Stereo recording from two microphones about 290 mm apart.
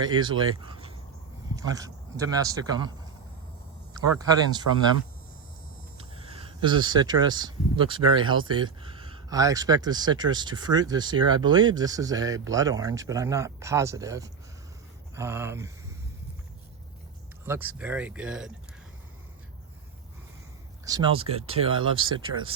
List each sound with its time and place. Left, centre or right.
0.2 s speech: centre
3.9 s speech: centre
6.0 s speech: centre
17.4 s speech: centre
20.8 s speech: centre
21.9 s speech: right